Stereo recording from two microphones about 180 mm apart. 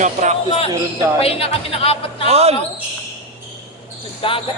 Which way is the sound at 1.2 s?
30° left (ahead or behind).